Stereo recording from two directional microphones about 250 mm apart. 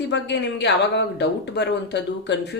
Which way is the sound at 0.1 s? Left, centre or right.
Left.